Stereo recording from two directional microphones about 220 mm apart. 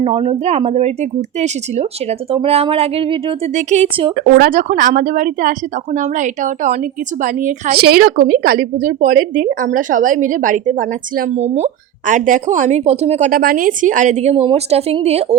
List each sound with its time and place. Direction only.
0.0 s a woman's voice: 25° right (ahead or behind)
4.2 s a woman's voice: 40° right (ahead or behind)